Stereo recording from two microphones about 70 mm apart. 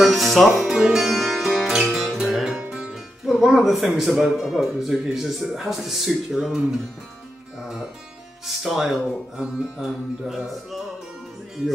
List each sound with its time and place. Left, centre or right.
0.0 s speech: centre
8.5 s speech: centre